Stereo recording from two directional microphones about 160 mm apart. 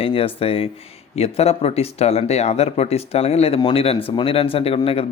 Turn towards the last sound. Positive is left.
turn(degrees=35)  # may be behind; listen again after turning